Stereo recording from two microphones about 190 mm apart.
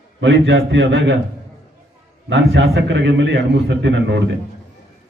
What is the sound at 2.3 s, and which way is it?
A man's voice, 65° right (ahead or behind).